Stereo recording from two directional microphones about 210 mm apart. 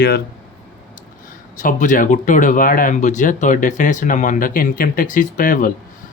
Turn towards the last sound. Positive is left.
turn(degrees=40)  # may be behind; listen again after turning